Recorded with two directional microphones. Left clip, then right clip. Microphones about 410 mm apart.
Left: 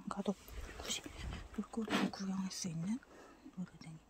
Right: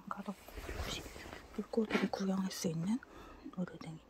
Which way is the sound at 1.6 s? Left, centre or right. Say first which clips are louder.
Right 3 dB; centre.